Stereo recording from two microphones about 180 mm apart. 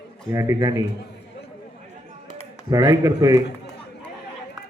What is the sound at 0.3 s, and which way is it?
Speech, 15° right (ahead or behind).